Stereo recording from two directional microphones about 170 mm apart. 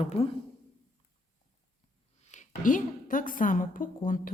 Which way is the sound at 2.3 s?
50° left (ahead or behind).